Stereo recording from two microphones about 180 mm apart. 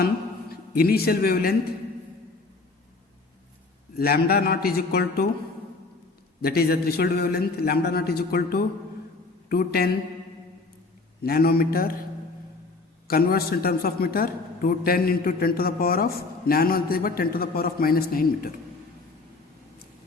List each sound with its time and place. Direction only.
0.7 s a man's voice: 55° left (ahead or behind)
3.9 s a man's voice: 55° left (ahead or behind)
6.4 s a man's voice: 60° left (ahead or behind)
11.2 s a man's voice: 60° left (ahead or behind)
13.1 s a man's voice: 60° left (ahead or behind)